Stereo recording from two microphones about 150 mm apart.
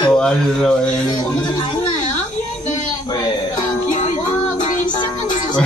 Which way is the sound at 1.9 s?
55° left (ahead or behind).